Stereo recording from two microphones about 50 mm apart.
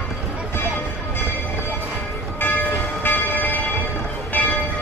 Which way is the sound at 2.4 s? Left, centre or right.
Left.